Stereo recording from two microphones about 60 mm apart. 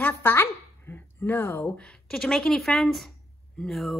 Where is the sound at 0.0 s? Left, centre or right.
Left.